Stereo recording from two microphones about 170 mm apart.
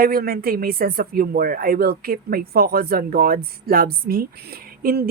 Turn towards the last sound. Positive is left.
turn(degrees=-60)  # may be behind; listen again after turning